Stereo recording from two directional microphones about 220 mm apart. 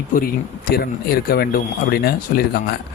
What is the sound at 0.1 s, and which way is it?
Speech, 40° left (ahead or behind).